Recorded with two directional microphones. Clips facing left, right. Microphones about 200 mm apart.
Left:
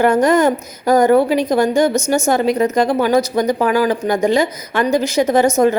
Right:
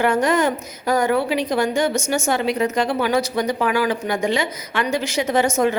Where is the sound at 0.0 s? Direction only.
40° left (ahead or behind).